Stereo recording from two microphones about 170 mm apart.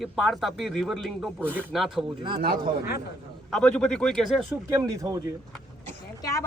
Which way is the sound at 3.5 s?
5° left (ahead or behind).